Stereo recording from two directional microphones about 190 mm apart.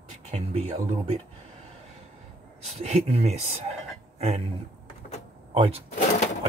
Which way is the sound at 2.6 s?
30° right (ahead or behind).